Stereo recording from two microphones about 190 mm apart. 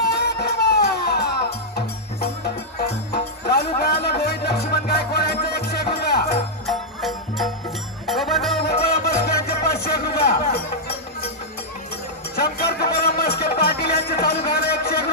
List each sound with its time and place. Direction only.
0.1 s music: 60° left (ahead or behind)
6.6 s music: centre (ahead or behind)
9.0 s music: 55° left (ahead or behind)
12.4 s music: 55° left (ahead or behind)